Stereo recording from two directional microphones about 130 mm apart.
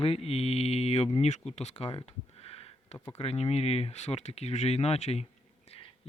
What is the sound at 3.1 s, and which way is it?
Speech, 55° left (ahead or behind).